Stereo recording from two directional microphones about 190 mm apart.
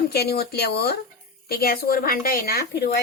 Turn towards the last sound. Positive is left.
turn(degrees=60)  # may be behind; listen again after turning